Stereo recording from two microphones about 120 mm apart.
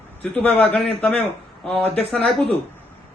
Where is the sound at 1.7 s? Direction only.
55° right (ahead or behind).